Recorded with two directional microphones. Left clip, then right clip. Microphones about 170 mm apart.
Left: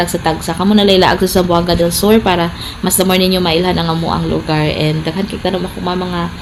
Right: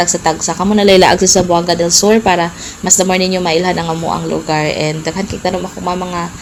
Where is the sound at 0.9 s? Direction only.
30° right (ahead or behind).